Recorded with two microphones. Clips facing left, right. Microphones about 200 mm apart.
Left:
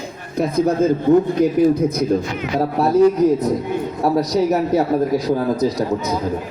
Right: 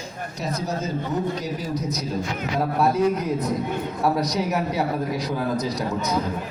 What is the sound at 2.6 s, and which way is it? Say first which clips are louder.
A man's voice: left 7 dB; 40° left (ahead or behind).